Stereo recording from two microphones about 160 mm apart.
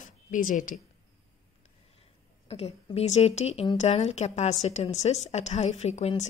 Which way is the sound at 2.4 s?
40° left (ahead or behind).